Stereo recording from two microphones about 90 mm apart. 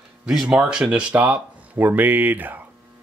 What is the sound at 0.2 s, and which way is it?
Speech, 5° right (ahead or behind).